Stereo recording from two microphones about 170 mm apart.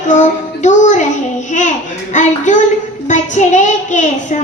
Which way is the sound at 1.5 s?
45° left (ahead or behind).